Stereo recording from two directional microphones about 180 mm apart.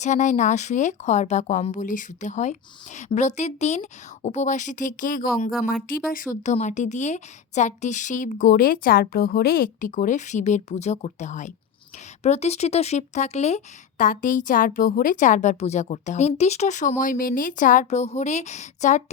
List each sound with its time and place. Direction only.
0.0 s speech: 40° left (ahead or behind)